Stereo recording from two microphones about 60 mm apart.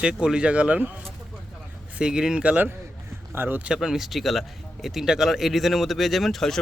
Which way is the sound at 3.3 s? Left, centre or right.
Right.